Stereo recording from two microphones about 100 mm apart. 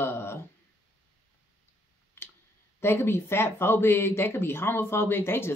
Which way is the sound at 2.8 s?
25° left (ahead or behind).